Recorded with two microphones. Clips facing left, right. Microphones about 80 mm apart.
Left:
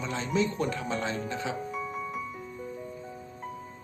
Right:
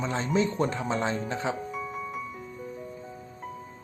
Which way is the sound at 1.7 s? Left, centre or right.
Centre.